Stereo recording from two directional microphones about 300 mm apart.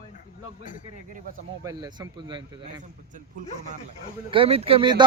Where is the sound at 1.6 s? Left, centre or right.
Centre.